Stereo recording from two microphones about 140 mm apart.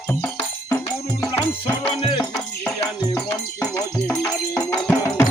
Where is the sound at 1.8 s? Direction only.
40° left (ahead or behind).